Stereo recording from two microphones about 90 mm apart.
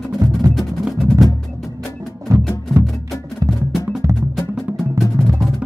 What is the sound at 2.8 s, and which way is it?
Music, centre (ahead or behind).